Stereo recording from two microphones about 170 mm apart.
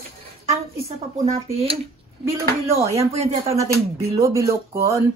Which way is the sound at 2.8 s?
35° right (ahead or behind).